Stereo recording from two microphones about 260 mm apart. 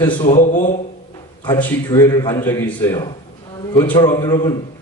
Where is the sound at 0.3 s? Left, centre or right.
Left.